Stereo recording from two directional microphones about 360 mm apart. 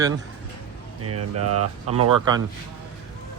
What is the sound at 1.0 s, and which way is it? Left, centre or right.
Speech, right.